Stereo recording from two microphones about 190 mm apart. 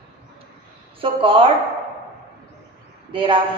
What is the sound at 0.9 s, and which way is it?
Speech, 25° right (ahead or behind).